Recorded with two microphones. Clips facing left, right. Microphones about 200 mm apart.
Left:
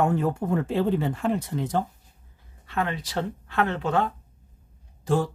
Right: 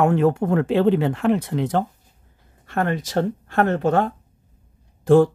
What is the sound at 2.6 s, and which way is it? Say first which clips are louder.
Speech: right 5 dB; 45° right (ahead or behind).